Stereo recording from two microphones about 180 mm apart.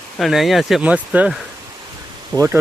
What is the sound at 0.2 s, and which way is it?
Speech, centre (ahead or behind).